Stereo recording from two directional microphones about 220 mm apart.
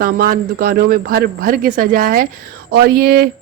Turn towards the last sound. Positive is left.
turn(degrees=-45)  # may be behind; listen again after turning